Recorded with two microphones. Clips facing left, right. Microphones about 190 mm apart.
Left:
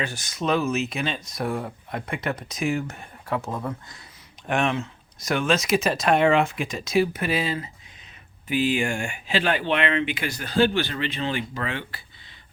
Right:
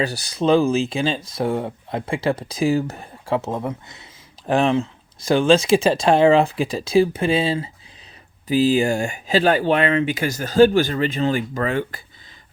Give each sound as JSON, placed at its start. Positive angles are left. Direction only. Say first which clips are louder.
{"t": 0.0, "sound": "speech", "louder": "right 7 dB", "side_deg": -35}
{"t": 4.4, "sound": "speech", "louder": "right 6 dB", "side_deg": -30}